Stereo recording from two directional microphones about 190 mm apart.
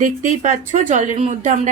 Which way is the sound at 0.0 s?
40° right (ahead or behind).